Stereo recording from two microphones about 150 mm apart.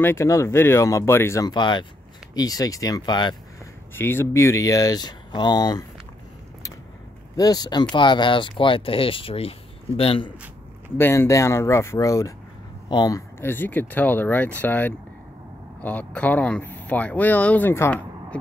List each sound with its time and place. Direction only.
0.0 s speech: 15° left (ahead or behind)
1.5 s speech: 30° left (ahead or behind)
3.9 s speech: 15° left (ahead or behind)
7.3 s speech: 25° left (ahead or behind)
11.0 s speech: 15° left (ahead or behind)
13.4 s speech: 15° left (ahead or behind)